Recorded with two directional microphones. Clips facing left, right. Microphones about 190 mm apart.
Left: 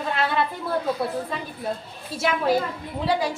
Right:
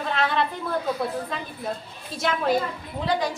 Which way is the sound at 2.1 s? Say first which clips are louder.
Left 1 dB; 5° left (ahead or behind).